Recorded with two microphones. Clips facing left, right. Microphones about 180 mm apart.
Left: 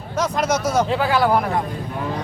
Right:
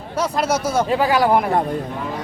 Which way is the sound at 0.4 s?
30° right (ahead or behind).